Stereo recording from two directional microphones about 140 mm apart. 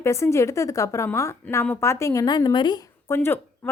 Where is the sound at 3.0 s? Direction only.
15° left (ahead or behind).